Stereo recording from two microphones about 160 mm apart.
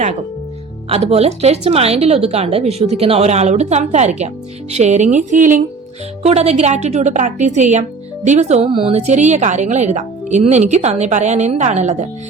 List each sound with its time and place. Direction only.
0.9 s a woman's voice: 40° right (ahead or behind); by 5.6 s 55° right (ahead or behind)
6.2 s a woman's voice: 40° right (ahead or behind)